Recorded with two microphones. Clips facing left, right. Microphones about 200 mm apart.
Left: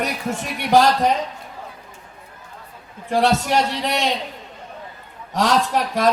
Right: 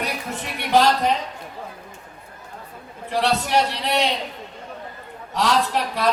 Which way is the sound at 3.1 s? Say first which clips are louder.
Left 4 dB; 45° left (ahead or behind).